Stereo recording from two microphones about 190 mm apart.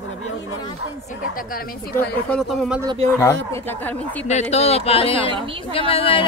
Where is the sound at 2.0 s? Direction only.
5° left (ahead or behind).